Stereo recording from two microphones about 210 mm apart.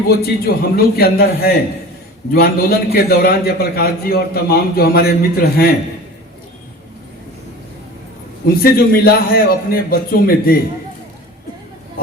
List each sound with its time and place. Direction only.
0.1 s a man's voice: 45° left (ahead or behind)
8.6 s a man's voice: 45° left (ahead or behind)